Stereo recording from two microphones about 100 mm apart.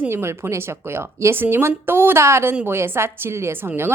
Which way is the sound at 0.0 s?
25° right (ahead or behind).